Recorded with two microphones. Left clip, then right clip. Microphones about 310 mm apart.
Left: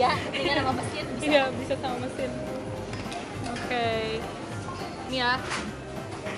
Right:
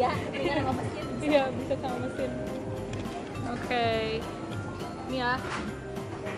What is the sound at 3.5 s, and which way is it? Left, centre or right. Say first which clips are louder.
Speech: even; centre.